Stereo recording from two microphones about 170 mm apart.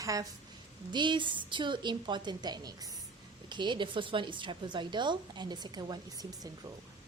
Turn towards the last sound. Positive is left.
turn(degrees=-20)  # may be behind; listen again after turning